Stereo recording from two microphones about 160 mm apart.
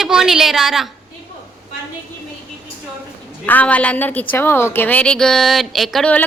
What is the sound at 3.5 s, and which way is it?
A woman's voice, 10° left (ahead or behind).